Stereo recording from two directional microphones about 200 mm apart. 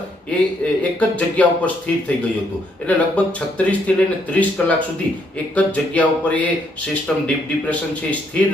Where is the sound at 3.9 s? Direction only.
5° left (ahead or behind).